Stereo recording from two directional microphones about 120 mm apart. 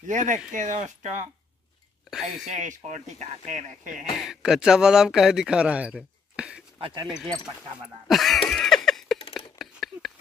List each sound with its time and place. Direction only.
0.0 s speech: 90° right
2.0 s speech: 5° right (ahead or behind)
2.5 s speech: 85° right
4.2 s a man's voice: 5° right (ahead or behind)
6.8 s speech: 45° right (ahead or behind)
7.1 s a man's voice: 5° right (ahead or behind)
8.1 s a sound: centre (ahead or behind)